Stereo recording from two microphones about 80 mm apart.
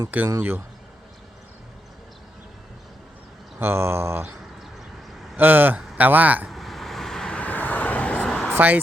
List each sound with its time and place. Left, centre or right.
0.1 s speech: right
3.6 s a sound: right
5.4 s speech: right
6.5 s vehicle: centre
8.5 s speech: right